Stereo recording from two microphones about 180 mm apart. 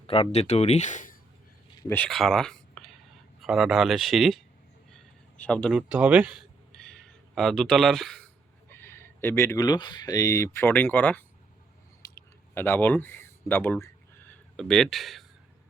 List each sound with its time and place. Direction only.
0.1 s speech: 35° left (ahead or behind)
1.9 s speech: 5° left (ahead or behind)
5.4 s speech: 5° left (ahead or behind)
5.9 s speech: 10° right (ahead or behind)
6.7 s a sound: 5° left (ahead or behind)
8.7 s speech: 10° left (ahead or behind)
12.0 s a sound: 20° left (ahead or behind)
12.5 s speech: 10° left (ahead or behind)
13.8 s a sound: 5° left (ahead or behind)